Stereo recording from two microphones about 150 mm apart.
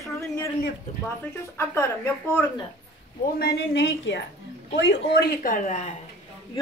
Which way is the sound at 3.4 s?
90° left.